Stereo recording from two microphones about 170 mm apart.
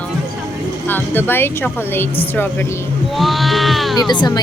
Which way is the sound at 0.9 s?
10° left (ahead or behind).